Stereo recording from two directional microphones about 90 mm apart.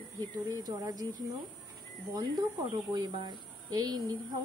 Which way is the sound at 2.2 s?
45° right (ahead or behind).